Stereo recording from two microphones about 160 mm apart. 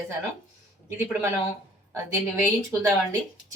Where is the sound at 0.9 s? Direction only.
15° right (ahead or behind).